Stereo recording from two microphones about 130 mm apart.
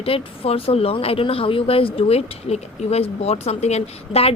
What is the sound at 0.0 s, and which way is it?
Speech, 45° left (ahead or behind).